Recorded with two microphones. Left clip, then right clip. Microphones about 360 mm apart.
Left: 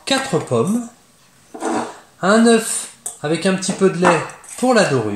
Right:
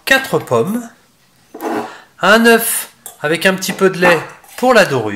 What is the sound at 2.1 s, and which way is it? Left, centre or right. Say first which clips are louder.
Speech: right 5 dB; right.